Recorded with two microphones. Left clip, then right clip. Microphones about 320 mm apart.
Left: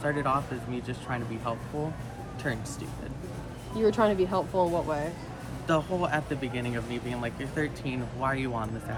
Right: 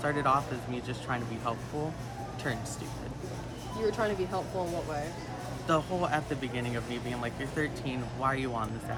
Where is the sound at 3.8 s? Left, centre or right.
Centre.